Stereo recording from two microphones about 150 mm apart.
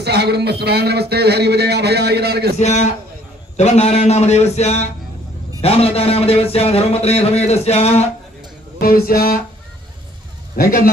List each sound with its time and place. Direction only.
0.0 s a man's voice: 90° right
2.6 s a man's voice: 50° left (ahead or behind)
8.8 s speech: 80° left
10.5 s a man's voice: 75° left (ahead or behind)